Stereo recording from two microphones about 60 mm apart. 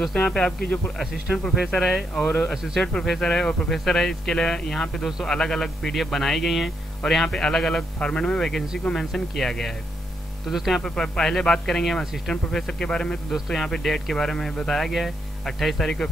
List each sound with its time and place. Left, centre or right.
0.0 s speech: centre
2.1 s speech: left
2.5 s speech: centre
2.8 s speech: centre
10.5 s speech: centre
10.8 s speech: centre